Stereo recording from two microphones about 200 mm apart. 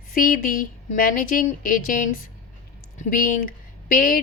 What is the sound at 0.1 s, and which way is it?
A woman's voice, 45° left (ahead or behind).